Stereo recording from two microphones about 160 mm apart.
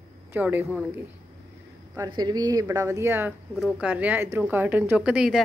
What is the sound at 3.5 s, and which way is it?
Speech, 5° right (ahead or behind).